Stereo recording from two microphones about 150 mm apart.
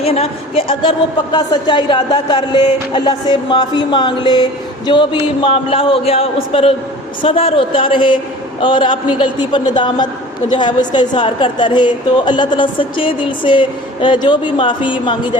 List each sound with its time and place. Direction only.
0.0 s a man's voice: 40° left (ahead or behind)